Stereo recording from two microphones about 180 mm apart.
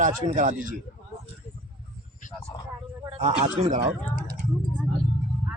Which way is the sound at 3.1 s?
35° right (ahead or behind).